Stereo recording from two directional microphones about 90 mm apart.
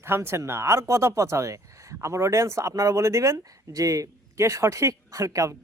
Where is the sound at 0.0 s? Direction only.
25° right (ahead or behind).